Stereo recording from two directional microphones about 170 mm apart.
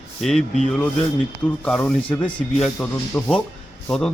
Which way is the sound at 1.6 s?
5° left (ahead or behind).